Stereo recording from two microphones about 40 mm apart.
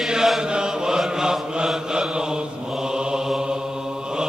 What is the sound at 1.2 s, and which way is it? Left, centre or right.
Mantra, centre.